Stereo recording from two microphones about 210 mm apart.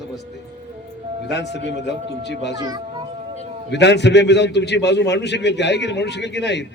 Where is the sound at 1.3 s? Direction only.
55° left (ahead or behind).